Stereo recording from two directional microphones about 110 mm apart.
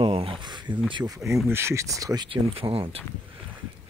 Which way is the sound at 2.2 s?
55° right (ahead or behind).